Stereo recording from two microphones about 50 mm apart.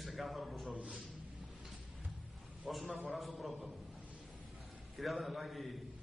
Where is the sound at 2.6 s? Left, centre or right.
Centre.